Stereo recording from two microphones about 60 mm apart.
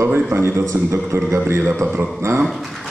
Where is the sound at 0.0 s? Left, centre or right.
Right.